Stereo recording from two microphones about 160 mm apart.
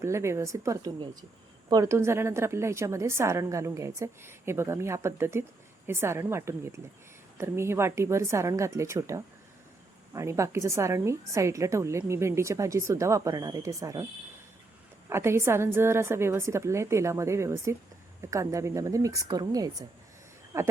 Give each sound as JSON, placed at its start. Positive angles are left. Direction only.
{"t": 0.0, "sound": "a woman's voice", "side_deg": -15}
{"t": 15.1, "sound": "a woman's voice", "side_deg": -15}